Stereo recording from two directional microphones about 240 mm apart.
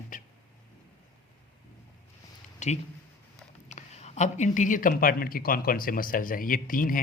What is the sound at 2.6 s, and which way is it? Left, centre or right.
Speech, left.